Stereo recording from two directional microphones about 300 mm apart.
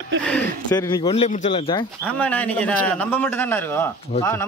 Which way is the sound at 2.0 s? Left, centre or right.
Centre.